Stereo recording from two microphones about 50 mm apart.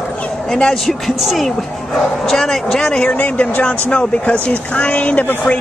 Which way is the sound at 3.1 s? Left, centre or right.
Left.